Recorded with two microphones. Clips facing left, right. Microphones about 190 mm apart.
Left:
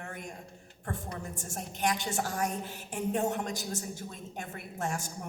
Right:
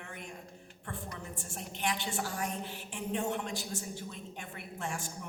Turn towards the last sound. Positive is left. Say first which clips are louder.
# left 4 dB
turn(degrees=45)  # may be behind; listen again after turning